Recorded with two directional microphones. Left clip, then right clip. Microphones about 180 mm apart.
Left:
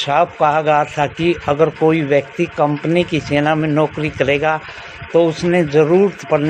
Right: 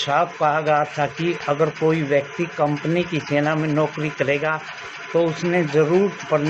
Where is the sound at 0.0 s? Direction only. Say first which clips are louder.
Left 5 dB; 55° left (ahead or behind).